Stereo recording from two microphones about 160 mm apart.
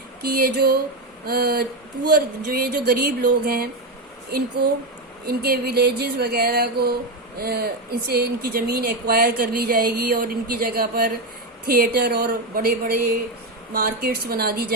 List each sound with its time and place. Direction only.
0.2 s speech: 70° right (ahead or behind)
5.2 s a sound: 75° right (ahead or behind)
7.3 s speech: 75° right (ahead or behind)